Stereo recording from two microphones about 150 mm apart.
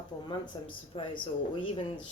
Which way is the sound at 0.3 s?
35° left (ahead or behind).